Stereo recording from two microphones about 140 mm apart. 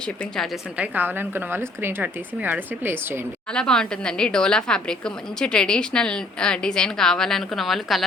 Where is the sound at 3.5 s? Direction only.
5° left (ahead or behind).